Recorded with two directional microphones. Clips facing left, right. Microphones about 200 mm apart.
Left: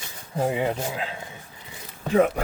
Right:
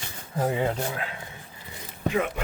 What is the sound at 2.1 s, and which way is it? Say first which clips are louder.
Speech: left 7 dB; 40° left (ahead or behind).